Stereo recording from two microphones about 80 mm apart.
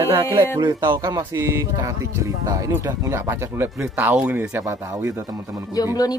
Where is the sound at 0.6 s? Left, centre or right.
Right.